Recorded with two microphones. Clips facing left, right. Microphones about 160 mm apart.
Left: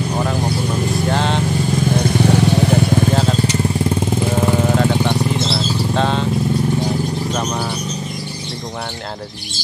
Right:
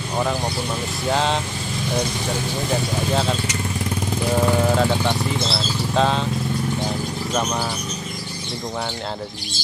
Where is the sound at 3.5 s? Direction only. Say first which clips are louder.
Left 8 dB; 25° left (ahead or behind).